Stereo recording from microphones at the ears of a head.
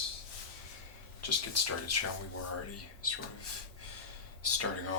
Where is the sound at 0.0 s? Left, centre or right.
Left.